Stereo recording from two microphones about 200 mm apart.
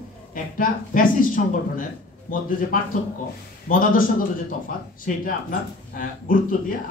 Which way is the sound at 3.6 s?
45° left (ahead or behind).